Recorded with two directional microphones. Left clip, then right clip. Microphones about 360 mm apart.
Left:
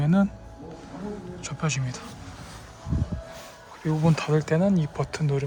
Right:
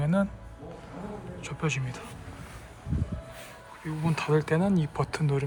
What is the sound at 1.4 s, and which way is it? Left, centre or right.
Speech, centre.